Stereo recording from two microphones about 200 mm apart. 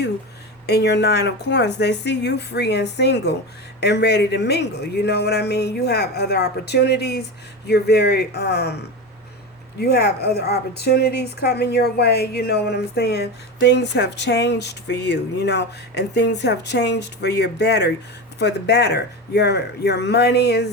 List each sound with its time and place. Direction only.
0.7 s speech: 55° left (ahead or behind)
9.7 s speech: 55° left (ahead or behind)